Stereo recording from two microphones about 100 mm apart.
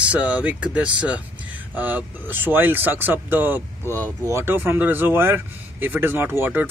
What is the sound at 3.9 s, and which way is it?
Speech, 35° right (ahead or behind).